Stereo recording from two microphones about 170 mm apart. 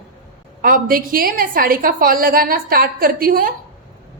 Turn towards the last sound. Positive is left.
turn(degrees=-55)  # may be behind; listen again after turning